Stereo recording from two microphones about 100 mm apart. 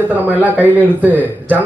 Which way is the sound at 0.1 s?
15° right (ahead or behind).